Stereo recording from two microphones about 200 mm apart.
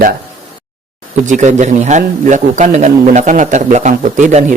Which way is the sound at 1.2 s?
35° right (ahead or behind).